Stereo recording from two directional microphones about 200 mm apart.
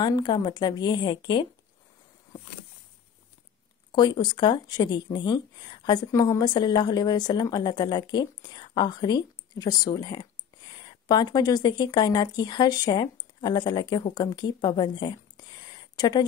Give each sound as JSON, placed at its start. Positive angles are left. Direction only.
{"t": 0.0, "sound": "speech", "side_deg": 20}
{"t": 3.9, "sound": "a woman's voice", "side_deg": 20}